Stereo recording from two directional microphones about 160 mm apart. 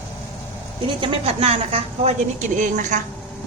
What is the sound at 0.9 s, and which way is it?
A woman's voice, 30° right (ahead or behind).